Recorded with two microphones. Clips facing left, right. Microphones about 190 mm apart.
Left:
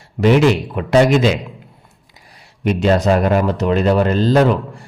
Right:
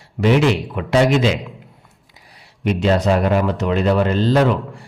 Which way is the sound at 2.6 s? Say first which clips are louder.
Left 2 dB; 45° left (ahead or behind).